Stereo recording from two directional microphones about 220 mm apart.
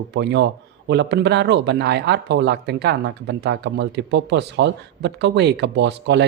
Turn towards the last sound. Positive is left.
turn(degrees=-50)  # may be behind; listen again after turning